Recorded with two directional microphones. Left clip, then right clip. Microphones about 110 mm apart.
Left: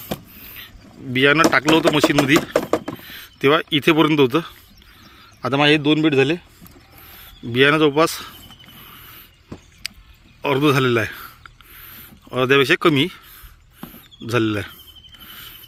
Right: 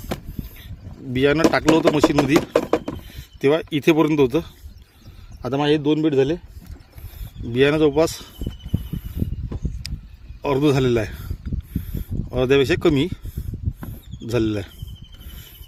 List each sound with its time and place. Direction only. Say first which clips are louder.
0.1 s vehicle: even; 10° right (ahead or behind)
1.1 s speech: left 3 dB; 15° right (ahead or behind)
2.9 s vehicle: left 4 dB; 10° right (ahead or behind)
3.7 s speech: left 2 dB; 5° right (ahead or behind)
5.5 s speech: left 3 dB; 15° left (ahead or behind)
7.5 s speech: left 2 dB; 15° right (ahead or behind)
9.8 s a sound: left 7 dB; 15° right (ahead or behind)
10.4 s speech: left 2 dB; 20° right (ahead or behind)
13.8 s a sound: left 4 dB; 15° right (ahead or behind)